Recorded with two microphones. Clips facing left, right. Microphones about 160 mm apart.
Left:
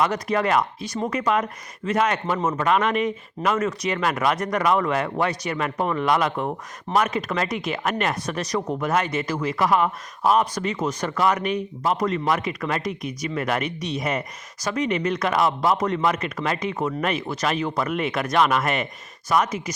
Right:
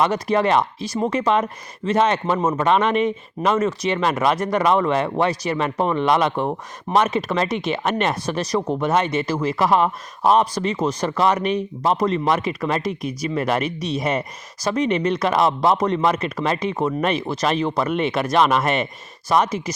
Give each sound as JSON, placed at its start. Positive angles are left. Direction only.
{"t": 0.0, "sound": "speech", "side_deg": -25}